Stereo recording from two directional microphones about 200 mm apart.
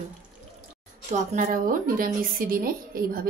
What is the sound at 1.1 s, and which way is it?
Speech, 40° right (ahead or behind).